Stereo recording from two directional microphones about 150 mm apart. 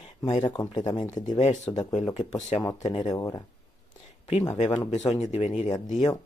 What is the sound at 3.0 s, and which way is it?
Speech, 25° left (ahead or behind).